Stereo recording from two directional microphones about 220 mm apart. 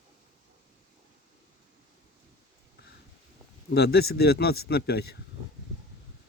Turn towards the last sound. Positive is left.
turn(degrees=45)  # may be behind; listen again after turning